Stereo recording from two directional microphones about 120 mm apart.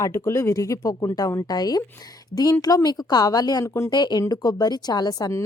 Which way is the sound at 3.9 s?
35° left (ahead or behind).